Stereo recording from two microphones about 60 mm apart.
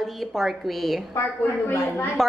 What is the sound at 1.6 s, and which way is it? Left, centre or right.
Speech, left.